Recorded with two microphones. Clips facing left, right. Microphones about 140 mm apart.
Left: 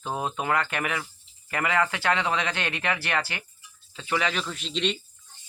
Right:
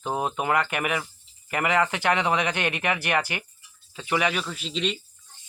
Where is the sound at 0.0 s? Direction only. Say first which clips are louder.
Right 3 dB; 15° right (ahead or behind).